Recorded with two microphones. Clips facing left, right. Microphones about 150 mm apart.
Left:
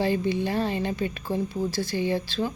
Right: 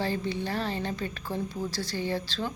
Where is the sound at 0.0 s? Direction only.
15° left (ahead or behind).